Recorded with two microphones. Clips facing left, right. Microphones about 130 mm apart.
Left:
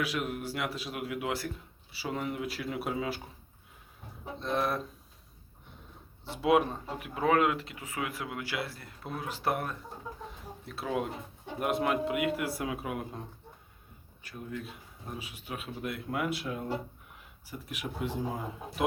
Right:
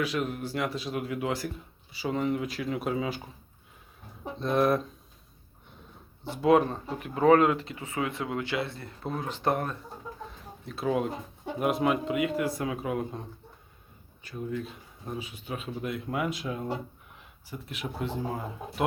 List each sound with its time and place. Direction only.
0.0 s speech: 5° left (ahead or behind)
4.4 s speech: centre (ahead or behind)
6.3 s speech: 5° left (ahead or behind)
7.9 s speech: 25° right (ahead or behind)
8.5 s speech: 5° left (ahead or behind)
14.3 s speech: 5° left (ahead or behind)